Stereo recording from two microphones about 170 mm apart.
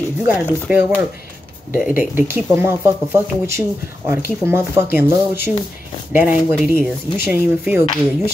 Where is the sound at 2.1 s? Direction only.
15° right (ahead or behind).